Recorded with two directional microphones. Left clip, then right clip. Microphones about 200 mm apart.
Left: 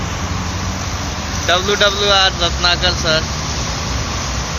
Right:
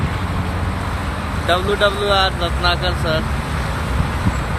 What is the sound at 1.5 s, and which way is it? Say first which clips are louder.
Speech: left 2 dB; 10° left (ahead or behind).